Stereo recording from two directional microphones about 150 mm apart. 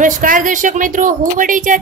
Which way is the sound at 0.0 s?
65° right (ahead or behind).